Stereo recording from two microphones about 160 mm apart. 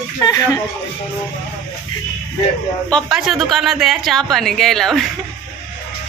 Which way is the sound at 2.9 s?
Centre (ahead or behind).